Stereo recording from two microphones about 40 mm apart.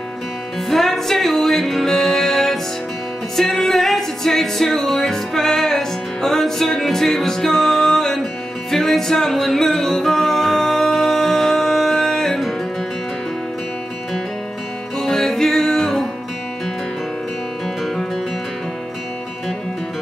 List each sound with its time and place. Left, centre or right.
0.7 s music: centre
15.0 s music: centre